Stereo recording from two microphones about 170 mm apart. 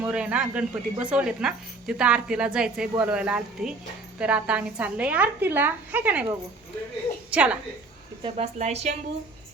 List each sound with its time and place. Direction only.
0.0 s a woman's voice: 10° right (ahead or behind)
7.3 s a woman's voice: 5° right (ahead or behind)
8.2 s a woman's voice: 40° right (ahead or behind)